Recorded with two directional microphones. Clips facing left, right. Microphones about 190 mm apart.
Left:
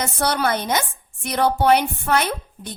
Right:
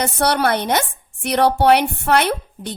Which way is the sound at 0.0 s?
65° right (ahead or behind).